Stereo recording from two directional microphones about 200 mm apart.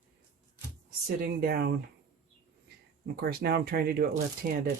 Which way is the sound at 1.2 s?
50° right (ahead or behind).